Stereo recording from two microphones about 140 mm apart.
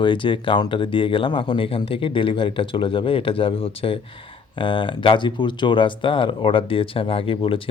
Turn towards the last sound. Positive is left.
turn(degrees=40)  # may be behind; listen again after turning